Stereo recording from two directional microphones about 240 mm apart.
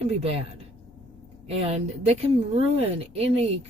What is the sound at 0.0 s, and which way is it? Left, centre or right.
Speech, right.